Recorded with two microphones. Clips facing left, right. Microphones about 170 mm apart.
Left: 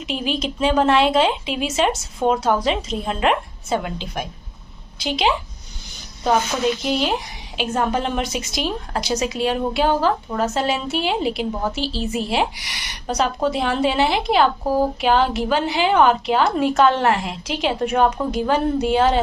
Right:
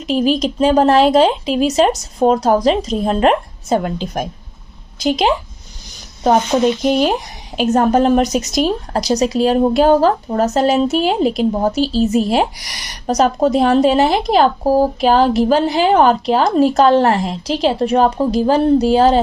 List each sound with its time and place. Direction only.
0.0 s a woman's voice: 40° right (ahead or behind)